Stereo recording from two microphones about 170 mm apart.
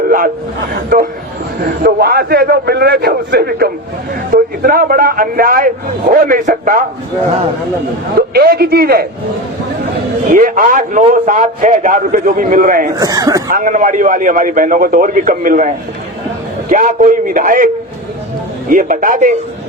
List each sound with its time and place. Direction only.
0.7 s a man's voice: 55° right (ahead or behind)
4.1 s a man's voice: 55° right (ahead or behind)
8.3 s a man's voice: 65° right (ahead or behind)
10.3 s a man's voice: 50° right (ahead or behind)
13.0 s speech: 20° right (ahead or behind)
13.5 s a man's voice: 55° right (ahead or behind)
18.7 s a man's voice: 50° right (ahead or behind)